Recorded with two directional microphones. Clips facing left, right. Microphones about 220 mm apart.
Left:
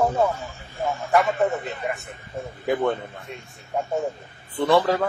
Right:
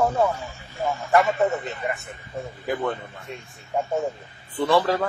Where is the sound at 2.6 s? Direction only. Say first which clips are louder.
Left 4 dB; 25° left (ahead or behind).